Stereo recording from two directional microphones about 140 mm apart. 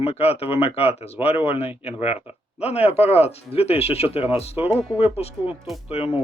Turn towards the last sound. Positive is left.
turn(degrees=45)  # may be behind; listen again after turning